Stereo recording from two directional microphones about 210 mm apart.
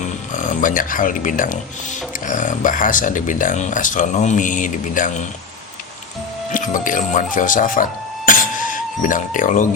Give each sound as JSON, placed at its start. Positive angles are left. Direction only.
{"t": 0.0, "sound": "speech", "side_deg": 35}
{"t": 6.5, "sound": "speech", "side_deg": 40}